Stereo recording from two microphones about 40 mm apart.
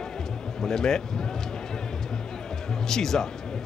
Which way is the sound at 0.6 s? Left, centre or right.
Centre.